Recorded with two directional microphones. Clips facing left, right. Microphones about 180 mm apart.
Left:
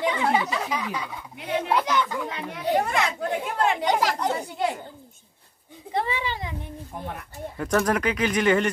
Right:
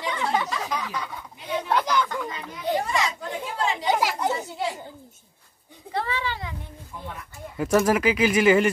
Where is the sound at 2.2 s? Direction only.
70° left (ahead or behind).